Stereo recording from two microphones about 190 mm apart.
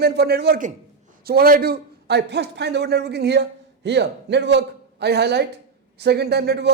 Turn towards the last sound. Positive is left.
turn(degrees=-60)  # may be behind; listen again after turning